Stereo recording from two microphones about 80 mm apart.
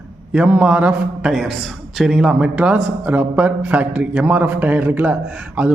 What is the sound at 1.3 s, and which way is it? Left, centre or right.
A woman's voice, centre.